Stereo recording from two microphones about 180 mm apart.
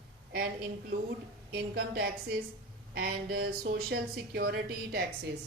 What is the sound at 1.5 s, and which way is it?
A woman's voice, 60° right (ahead or behind).